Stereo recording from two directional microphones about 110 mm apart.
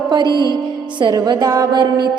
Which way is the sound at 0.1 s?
40° right (ahead or behind).